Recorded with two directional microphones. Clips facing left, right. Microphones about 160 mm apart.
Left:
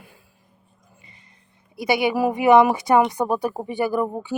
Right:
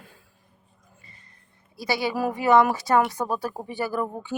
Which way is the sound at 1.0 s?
20° left (ahead or behind).